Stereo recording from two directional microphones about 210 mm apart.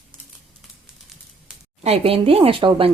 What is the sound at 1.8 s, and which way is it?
Speech, 30° right (ahead or behind).